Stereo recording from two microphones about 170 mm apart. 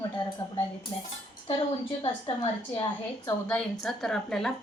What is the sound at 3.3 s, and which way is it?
A woman's voice, 10° left (ahead or behind).